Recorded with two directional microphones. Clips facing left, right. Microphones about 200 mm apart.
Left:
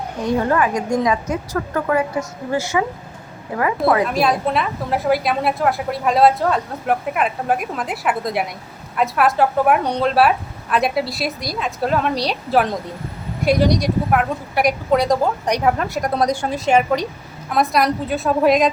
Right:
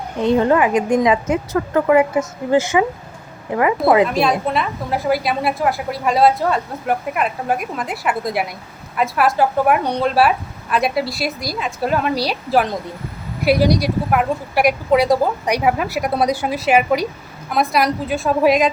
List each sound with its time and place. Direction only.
0.3 s a woman's voice: 20° right (ahead or behind)
4.1 s a woman's voice: centre (ahead or behind)